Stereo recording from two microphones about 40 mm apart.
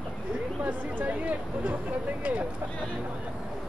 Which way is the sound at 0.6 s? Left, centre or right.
Right.